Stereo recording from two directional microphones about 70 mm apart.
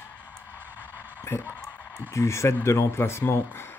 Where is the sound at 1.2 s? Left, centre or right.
Left.